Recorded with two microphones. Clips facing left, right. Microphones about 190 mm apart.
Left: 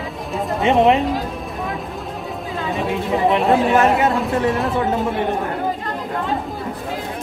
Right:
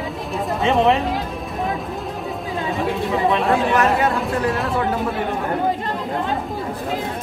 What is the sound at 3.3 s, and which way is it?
Speech, 25° left (ahead or behind).